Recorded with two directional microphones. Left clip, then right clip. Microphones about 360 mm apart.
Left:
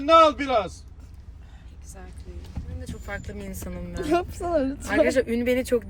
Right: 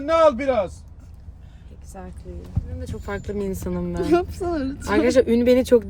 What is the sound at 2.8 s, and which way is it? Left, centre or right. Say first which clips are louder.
Speech: right 5 dB; centre.